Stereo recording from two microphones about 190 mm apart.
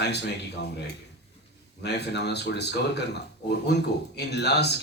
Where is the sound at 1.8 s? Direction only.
60° left (ahead or behind).